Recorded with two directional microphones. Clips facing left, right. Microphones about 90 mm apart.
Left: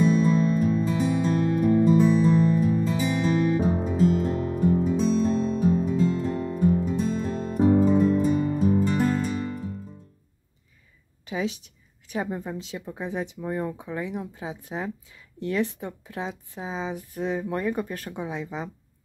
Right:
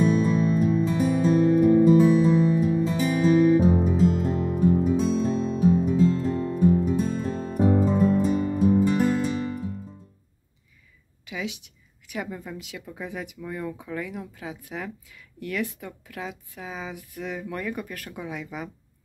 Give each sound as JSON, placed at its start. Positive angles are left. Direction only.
{"t": 0.0, "sound": "music", "side_deg": 0}
{"t": 11.2, "sound": "a woman's voice", "side_deg": 35}